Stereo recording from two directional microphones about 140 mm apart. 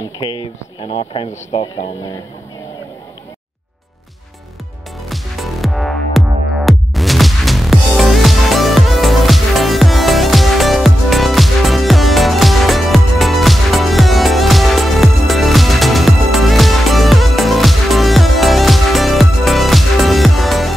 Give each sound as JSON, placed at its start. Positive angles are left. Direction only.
{"t": 0.2, "sound": "speech", "side_deg": 30}
{"t": 5.1, "sound": "music", "side_deg": 0}